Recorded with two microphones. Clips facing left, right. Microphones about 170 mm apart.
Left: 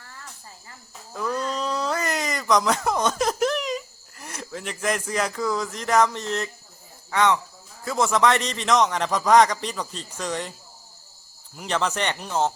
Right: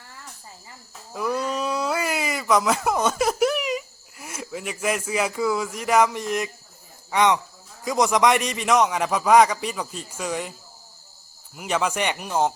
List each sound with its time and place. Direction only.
1.1 s a sound: 10° right (ahead or behind)
7.1 s a man's voice: 15° right (ahead or behind)
11.5 s a man's voice: 10° right (ahead or behind)